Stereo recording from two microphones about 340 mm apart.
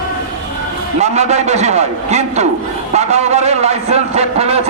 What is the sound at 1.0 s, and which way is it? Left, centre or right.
A man's voice, centre.